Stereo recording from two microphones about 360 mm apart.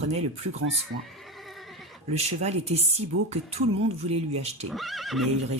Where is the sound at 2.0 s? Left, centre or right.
Centre.